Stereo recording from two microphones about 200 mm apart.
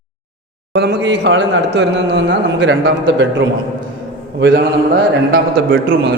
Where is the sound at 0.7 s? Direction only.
55° right (ahead or behind).